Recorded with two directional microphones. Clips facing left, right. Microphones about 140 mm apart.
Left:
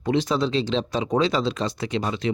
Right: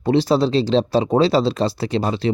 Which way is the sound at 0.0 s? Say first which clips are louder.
Right 6 dB; 35° right (ahead or behind).